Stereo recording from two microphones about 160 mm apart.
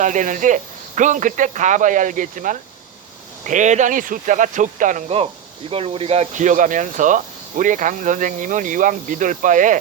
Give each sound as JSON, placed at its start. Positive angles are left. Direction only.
{"t": 0.0, "sound": "speech", "side_deg": -50}
{"t": 5.0, "sound": "speech", "side_deg": -35}